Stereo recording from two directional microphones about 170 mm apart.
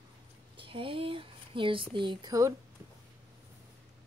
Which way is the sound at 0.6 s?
30° right (ahead or behind).